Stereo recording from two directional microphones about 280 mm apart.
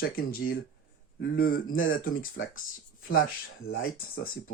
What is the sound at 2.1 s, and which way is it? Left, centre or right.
Speech, left.